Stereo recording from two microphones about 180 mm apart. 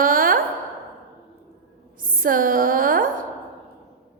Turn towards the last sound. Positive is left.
turn(degrees=-50)  # may be behind; listen again after turning